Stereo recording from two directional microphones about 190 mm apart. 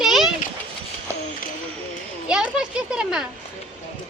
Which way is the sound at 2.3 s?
5° right (ahead or behind).